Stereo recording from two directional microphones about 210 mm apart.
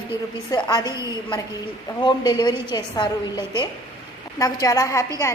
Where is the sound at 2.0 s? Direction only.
20° left (ahead or behind).